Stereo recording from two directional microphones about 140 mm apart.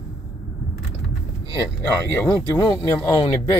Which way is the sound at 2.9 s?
20° left (ahead or behind).